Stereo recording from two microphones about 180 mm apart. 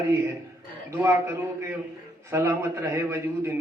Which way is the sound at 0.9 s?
15° right (ahead or behind).